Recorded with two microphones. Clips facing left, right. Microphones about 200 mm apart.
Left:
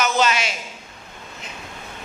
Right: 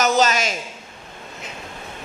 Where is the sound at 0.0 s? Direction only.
40° right (ahead or behind).